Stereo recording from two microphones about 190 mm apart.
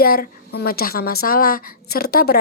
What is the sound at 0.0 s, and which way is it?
A woman's voice, 55° left (ahead or behind).